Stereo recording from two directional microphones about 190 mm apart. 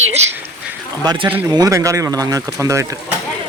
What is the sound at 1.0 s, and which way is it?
Speech, 25° right (ahead or behind).